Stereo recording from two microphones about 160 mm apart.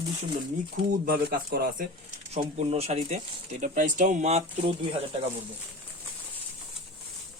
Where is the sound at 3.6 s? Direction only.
55° right (ahead or behind); by 5.0 s 35° right (ahead or behind).